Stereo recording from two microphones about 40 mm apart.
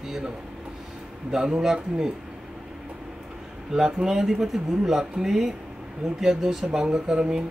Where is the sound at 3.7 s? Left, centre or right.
Centre.